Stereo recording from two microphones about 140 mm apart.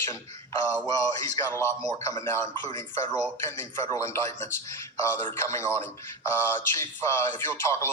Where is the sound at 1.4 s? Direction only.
20° left (ahead or behind).